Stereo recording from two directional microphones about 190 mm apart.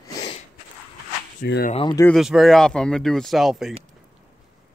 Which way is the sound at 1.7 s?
30° left (ahead or behind).